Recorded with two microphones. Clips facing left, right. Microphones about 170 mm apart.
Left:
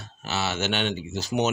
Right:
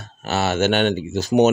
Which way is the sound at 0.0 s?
50° right (ahead or behind).